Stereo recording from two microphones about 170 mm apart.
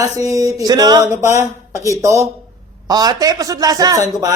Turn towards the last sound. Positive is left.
turn(degrees=-20)  # may be behind; listen again after turning